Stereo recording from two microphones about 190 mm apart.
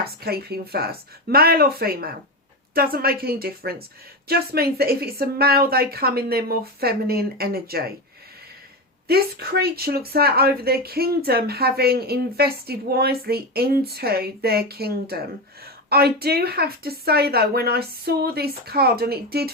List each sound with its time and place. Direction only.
0.0 s speech: 55° right (ahead or behind)
9.0 s speech: 55° right (ahead or behind)